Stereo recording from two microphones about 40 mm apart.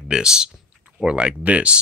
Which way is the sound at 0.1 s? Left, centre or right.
Centre.